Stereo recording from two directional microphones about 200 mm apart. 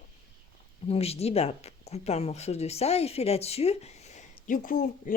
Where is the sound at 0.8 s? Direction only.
30° left (ahead or behind).